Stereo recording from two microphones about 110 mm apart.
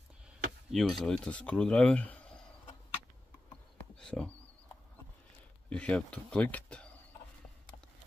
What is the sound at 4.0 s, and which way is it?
Speech, 10° left (ahead or behind).